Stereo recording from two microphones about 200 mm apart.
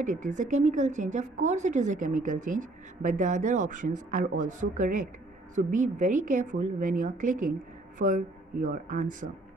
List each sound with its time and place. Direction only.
0.0 s a woman's voice: 40° right (ahead or behind)